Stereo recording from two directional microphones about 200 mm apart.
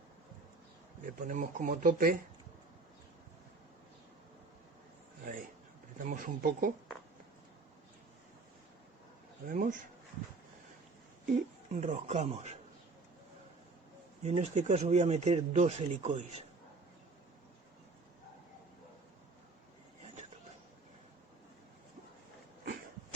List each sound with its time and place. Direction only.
1.0 s speech: 40° right (ahead or behind)
6.0 s speech: 40° right (ahead or behind)
9.5 s speech: 40° right (ahead or behind)
11.3 s speech: 40° right (ahead or behind)
14.2 s speech: 35° right (ahead or behind)